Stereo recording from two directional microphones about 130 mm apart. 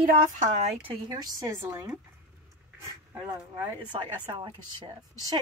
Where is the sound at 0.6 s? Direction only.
55° right (ahead or behind).